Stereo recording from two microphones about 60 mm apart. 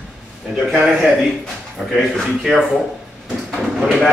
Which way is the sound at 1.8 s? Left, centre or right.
Right.